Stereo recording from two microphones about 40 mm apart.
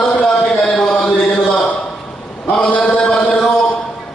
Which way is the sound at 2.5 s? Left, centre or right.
Left.